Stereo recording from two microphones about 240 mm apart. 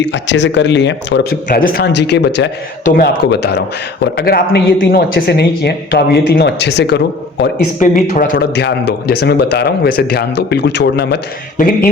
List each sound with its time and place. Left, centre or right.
0.1 s a man's voice: left